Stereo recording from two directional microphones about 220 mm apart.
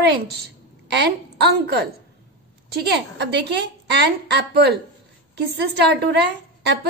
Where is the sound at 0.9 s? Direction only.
50° right (ahead or behind).